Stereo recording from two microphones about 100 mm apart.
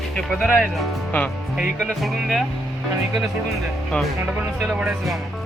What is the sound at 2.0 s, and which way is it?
Speech, centre (ahead or behind).